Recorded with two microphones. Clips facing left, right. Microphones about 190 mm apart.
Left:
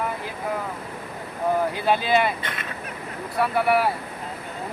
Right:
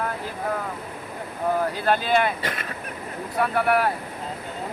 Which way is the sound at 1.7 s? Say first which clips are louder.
Left 1 dB; 10° left (ahead or behind).